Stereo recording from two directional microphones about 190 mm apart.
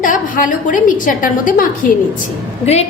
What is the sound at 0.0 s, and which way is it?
A woman's voice, 45° left (ahead or behind).